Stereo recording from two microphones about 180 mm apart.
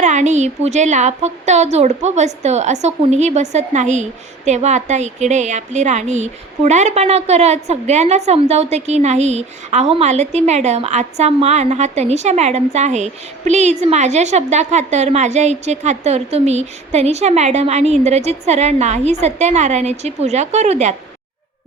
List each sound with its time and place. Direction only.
0.0 s a woman's voice: 40° right (ahead or behind)